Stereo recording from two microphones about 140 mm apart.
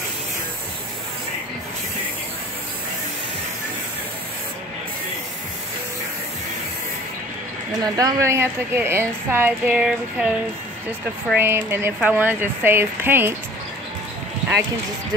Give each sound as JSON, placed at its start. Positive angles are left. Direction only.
{"t": 7.8, "sound": "a woman's voice", "side_deg": -25}
{"t": 11.3, "sound": "a woman's voice", "side_deg": -15}